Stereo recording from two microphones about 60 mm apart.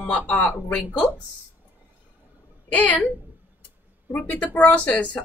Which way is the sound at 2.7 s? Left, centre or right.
Left.